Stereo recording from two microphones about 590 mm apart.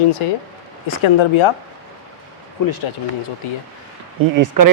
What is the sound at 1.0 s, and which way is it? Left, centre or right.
Speech, left.